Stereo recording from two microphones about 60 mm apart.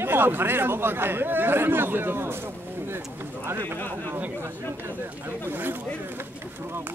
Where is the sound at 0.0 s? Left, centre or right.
Right.